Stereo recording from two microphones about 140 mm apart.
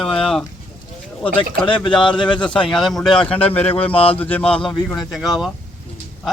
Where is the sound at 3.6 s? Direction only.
45° left (ahead or behind).